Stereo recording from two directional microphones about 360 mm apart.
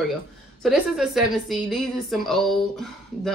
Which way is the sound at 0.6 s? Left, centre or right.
Centre.